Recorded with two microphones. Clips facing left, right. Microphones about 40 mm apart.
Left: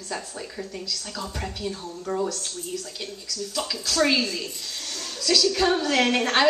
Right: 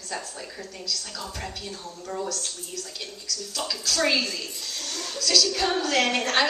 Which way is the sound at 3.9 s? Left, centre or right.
Centre.